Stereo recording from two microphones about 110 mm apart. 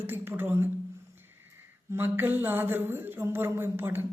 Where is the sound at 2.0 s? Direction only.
20° right (ahead or behind).